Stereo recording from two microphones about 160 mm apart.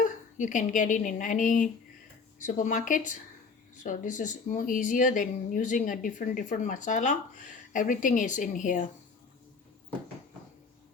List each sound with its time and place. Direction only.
0.0 s speech: 50° left (ahead or behind)